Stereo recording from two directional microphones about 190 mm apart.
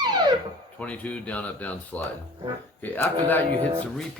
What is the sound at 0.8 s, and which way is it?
Speech, 5° left (ahead or behind).